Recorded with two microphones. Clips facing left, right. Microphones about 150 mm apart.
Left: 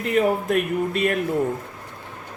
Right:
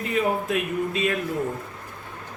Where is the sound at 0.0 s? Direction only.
65° left (ahead or behind).